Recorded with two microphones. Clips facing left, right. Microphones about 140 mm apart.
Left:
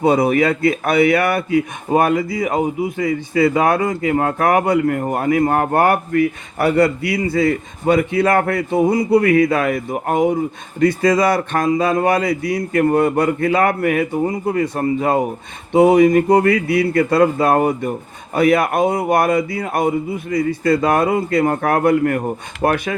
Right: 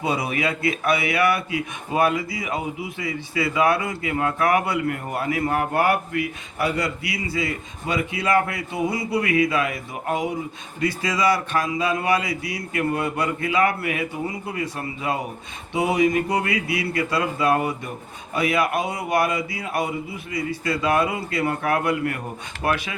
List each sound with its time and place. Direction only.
0.0 s speech: 50° left (ahead or behind)